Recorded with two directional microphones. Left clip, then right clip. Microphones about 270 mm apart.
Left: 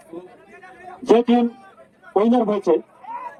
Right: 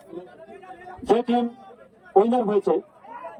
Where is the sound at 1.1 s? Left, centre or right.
Centre.